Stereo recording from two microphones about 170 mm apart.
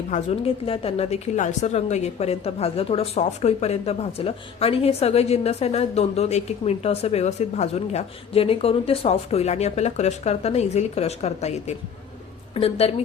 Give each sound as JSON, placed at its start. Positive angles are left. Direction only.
{"t": 0.1, "sound": "a woman's voice", "side_deg": 35}